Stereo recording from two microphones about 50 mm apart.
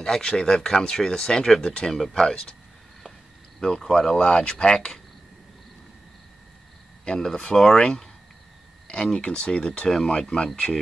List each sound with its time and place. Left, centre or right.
0.0 s speech: centre
3.6 s speech: centre
4.2 s speech: centre
7.1 s speech: centre